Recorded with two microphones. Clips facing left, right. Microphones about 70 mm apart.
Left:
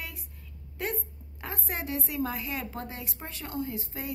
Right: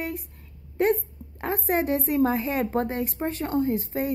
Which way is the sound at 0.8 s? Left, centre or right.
Right.